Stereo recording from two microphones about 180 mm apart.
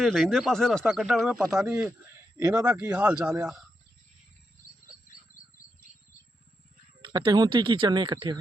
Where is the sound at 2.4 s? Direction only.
15° right (ahead or behind).